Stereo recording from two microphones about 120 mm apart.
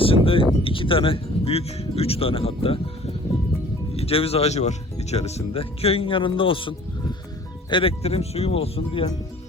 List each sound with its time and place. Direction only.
0.0 s a sound: 50° left (ahead or behind)
0.6 s speech: 45° left (ahead or behind)
3.9 s speech: 55° left (ahead or behind)